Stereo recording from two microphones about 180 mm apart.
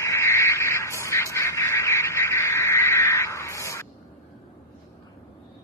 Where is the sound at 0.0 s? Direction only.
15° left (ahead or behind).